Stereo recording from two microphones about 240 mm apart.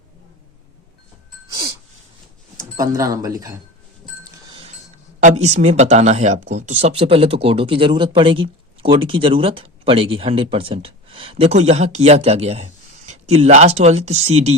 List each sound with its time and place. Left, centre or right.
2.6 s speech: centre
4.2 s a sound: right
5.2 s speech: right